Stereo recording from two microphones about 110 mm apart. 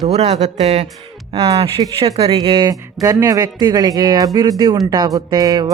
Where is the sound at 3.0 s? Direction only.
30° right (ahead or behind).